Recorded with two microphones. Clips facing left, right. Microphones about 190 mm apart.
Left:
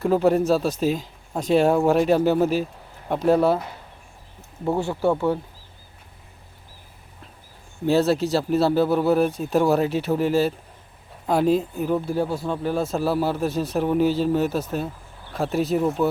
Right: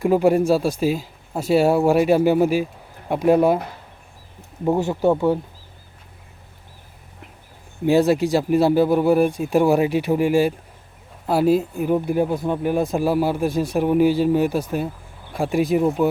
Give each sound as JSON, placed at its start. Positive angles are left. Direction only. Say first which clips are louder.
{"t": 0.0, "sound": "speech", "louder": "right 2 dB", "side_deg": -10}
{"t": 4.6, "sound": "speech", "louder": "right 3 dB", "side_deg": -15}
{"t": 7.9, "sound": "speech", "louder": "right 3 dB", "side_deg": -15}